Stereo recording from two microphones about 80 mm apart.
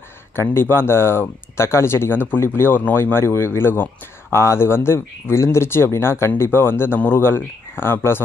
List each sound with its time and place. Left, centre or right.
0.4 s speech: left